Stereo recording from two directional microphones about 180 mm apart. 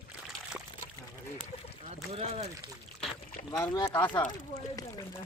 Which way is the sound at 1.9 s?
35° right (ahead or behind).